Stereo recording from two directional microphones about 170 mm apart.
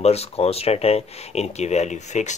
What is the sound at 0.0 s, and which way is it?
Speech, 40° left (ahead or behind).